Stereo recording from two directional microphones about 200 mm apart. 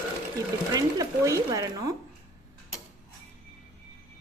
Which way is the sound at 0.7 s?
15° right (ahead or behind).